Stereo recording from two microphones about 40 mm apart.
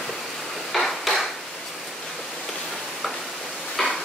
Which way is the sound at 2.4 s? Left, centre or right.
Centre.